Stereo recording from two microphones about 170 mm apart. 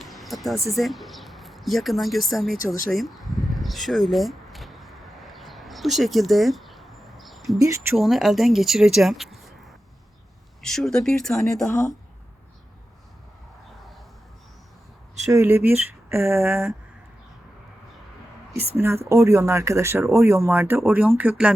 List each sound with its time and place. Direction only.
0.0 s a sound: centre (ahead or behind)
7.9 s speech: centre (ahead or behind)
10.6 s speech: centre (ahead or behind)
15.3 s speech: 15° right (ahead or behind)
18.6 s speech: 15° right (ahead or behind)